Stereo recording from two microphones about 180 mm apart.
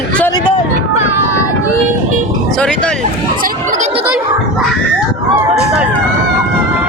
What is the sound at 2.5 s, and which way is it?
Speech, 5° left (ahead or behind).